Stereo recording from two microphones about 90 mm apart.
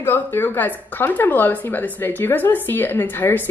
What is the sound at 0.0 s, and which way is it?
A woman's voice, 25° left (ahead or behind).